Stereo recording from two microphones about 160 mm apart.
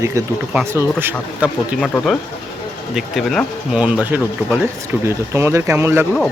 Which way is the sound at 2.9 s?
Centre (ahead or behind).